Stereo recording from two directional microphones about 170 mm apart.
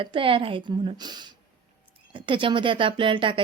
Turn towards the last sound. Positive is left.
turn(degrees=-30)  # may be behind; listen again after turning